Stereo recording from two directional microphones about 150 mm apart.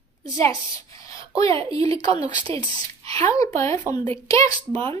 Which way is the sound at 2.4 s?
40° right (ahead or behind).